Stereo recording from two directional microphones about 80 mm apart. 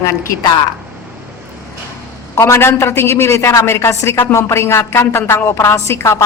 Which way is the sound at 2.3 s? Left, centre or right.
Left.